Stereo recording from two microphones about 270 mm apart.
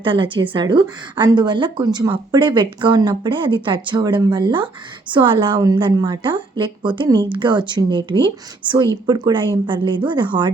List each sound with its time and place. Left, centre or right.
0.0 s speech: centre